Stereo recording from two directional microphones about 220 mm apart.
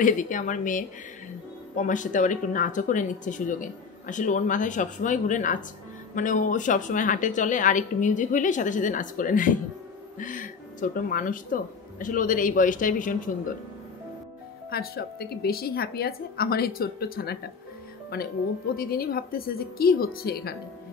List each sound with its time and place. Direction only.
0.0 s speech: 35° left (ahead or behind)
14.7 s a woman's voice: 45° left (ahead or behind)